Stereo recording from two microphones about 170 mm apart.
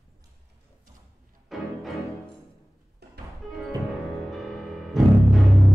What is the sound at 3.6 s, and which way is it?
Music, centre (ahead or behind).